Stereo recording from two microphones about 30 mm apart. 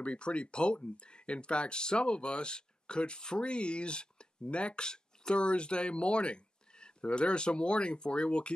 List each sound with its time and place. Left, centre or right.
0.0 s speech: left
4.8 s a sound: left
5.3 s speech: left